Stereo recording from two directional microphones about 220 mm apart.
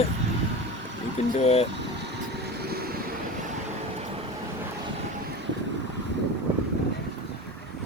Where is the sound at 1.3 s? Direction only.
30° left (ahead or behind).